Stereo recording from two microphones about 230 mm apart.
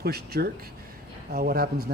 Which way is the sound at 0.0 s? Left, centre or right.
Right.